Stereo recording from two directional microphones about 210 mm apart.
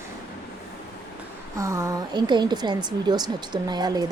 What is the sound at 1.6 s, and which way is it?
Speech, 15° right (ahead or behind).